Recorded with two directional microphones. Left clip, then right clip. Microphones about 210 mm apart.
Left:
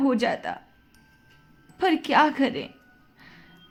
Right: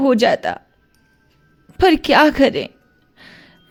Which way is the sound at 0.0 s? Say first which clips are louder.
Right 10 dB; 50° right (ahead or behind).